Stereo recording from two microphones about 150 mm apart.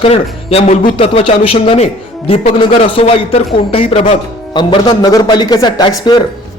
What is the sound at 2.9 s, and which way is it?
A man's voice, 40° left (ahead or behind).